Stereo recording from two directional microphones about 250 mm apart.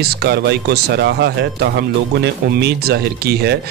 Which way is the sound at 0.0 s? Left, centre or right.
Right.